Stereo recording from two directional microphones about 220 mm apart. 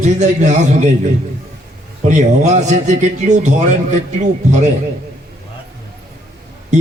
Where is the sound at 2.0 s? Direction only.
35° right (ahead or behind).